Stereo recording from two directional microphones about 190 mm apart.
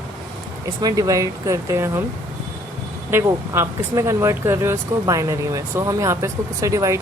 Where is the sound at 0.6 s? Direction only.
20° right (ahead or behind).